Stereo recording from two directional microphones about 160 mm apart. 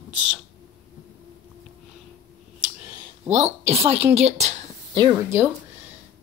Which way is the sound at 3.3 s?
45° right (ahead or behind).